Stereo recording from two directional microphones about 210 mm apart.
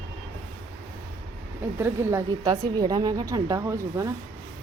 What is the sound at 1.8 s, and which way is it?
A woman's voice, 10° right (ahead or behind).